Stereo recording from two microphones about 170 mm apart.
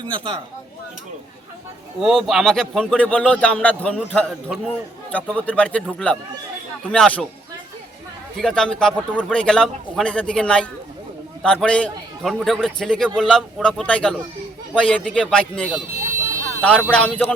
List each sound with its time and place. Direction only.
0.0 s speech: 30° right (ahead or behind)
2.0 s a man's voice: centre (ahead or behind)
8.4 s a man's voice: 5° left (ahead or behind)